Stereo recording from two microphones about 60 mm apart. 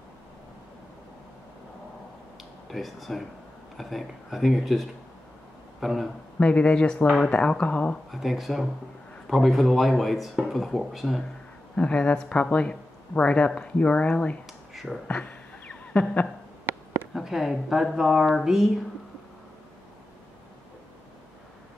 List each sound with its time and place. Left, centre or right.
2.7 s speech: centre
6.4 s speech: centre
8.1 s speech: centre
11.7 s speech: centre
14.4 s a sound: centre
15.0 s a sound: left
17.1 s speech: centre